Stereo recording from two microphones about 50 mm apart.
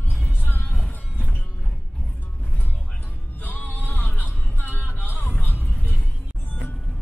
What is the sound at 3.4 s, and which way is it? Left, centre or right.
Vehicle, left.